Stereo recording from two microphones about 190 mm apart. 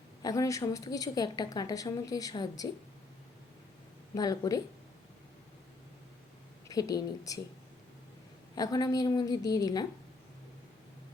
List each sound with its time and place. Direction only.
0.2 s a woman's voice: 20° left (ahead or behind)
4.1 s a woman's voice: 20° left (ahead or behind)
6.7 s a woman's voice: 20° left (ahead or behind)
8.5 s a woman's voice: 20° left (ahead or behind)